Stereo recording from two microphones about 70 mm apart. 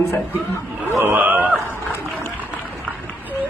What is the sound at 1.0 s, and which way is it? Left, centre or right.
Speech, right.